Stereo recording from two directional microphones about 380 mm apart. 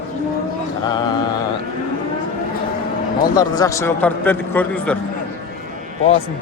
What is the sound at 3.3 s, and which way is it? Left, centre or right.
A man's voice, centre.